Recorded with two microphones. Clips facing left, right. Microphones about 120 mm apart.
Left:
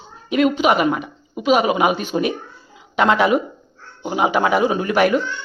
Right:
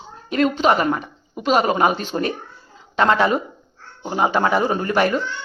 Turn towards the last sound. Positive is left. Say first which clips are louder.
# left 2 dB
turn(degrees=10)  # may be behind; listen again after turning